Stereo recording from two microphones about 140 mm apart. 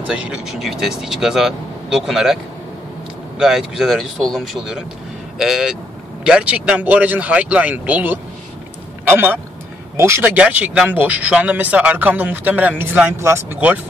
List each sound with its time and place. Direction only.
0.3 s speech: 5° right (ahead or behind)
3.3 s speech: 5° right (ahead or behind)